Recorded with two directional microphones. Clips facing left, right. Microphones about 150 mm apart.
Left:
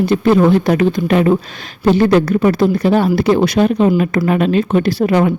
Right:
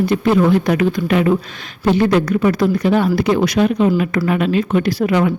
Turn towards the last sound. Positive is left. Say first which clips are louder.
# left 2 dB
turn(degrees=30)  # may be behind; listen again after turning